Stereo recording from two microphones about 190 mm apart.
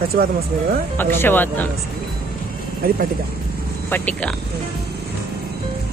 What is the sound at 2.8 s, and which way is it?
Speech, 55° right (ahead or behind).